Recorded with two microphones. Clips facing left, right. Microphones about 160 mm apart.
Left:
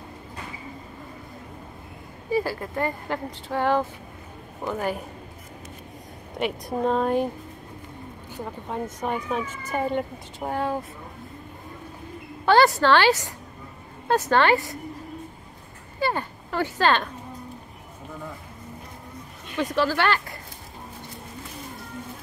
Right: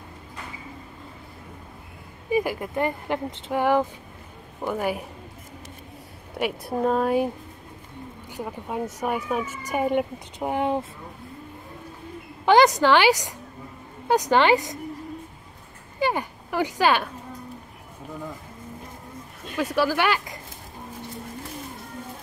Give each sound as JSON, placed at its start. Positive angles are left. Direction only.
{"t": 2.3, "sound": "speech", "side_deg": -15}
{"t": 6.4, "sound": "a woman's voice", "side_deg": -5}
{"t": 8.3, "sound": "speech", "side_deg": -10}
{"t": 12.4, "sound": "speech", "side_deg": -15}
{"t": 16.0, "sound": "speech", "side_deg": -15}
{"t": 19.5, "sound": "speech", "side_deg": -10}